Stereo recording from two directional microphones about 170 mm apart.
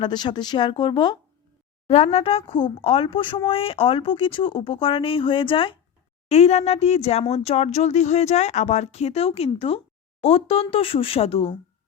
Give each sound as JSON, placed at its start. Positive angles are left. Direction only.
{"t": 0.0, "sound": "speech", "side_deg": 25}
{"t": 1.9, "sound": "speech", "side_deg": 40}